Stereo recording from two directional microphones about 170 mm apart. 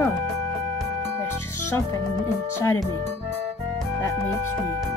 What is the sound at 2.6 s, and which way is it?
Speech, 15° left (ahead or behind).